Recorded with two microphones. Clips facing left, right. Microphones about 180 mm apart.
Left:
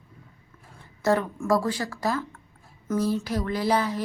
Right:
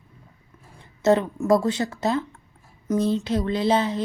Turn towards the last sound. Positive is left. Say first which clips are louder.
# right 3 dB
turn(degrees=-25)  # may be behind; listen again after turning